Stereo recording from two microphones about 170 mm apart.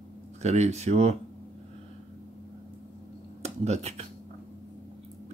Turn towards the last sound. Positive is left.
turn(degrees=-40)  # may be behind; listen again after turning